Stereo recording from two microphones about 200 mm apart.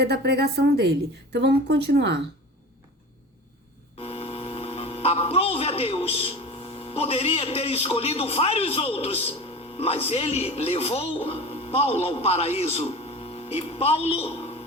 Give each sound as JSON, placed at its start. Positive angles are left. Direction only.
{"t": 0.0, "sound": "a woman's voice", "side_deg": -55}
{"t": 3.9, "sound": "speech", "side_deg": 30}